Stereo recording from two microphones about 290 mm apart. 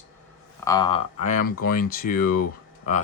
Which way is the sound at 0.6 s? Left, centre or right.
Centre.